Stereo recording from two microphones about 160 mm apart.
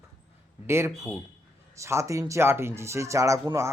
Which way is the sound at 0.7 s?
15° right (ahead or behind).